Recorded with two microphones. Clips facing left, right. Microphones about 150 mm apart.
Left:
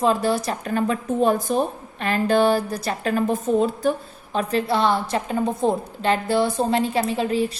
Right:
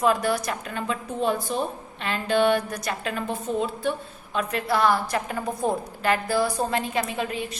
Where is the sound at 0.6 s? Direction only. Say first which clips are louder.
Left 7 dB; 45° left (ahead or behind).